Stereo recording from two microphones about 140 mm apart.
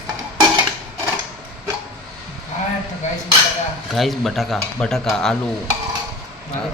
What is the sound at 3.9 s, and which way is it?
Speech, centre (ahead or behind).